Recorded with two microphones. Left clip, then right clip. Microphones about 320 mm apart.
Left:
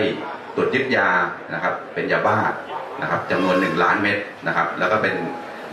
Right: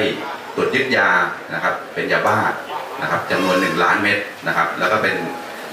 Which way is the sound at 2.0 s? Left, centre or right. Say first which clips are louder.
Right 2 dB; centre.